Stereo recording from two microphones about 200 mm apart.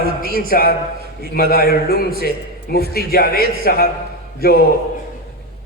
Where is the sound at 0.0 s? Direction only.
50° right (ahead or behind).